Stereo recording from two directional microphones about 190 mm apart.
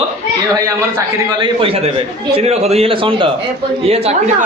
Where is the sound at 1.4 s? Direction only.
30° right (ahead or behind).